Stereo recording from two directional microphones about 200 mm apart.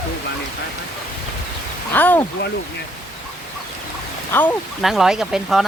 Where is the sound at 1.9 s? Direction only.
10° left (ahead or behind).